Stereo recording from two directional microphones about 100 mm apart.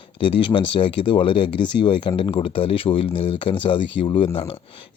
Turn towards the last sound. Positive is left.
turn(degrees=60)  # may be behind; listen again after turning